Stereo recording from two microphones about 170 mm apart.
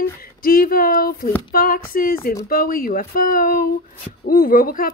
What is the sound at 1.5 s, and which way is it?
A woman's voice, 60° left (ahead or behind).